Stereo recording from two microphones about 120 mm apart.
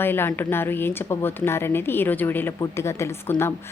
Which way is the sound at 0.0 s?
20° left (ahead or behind).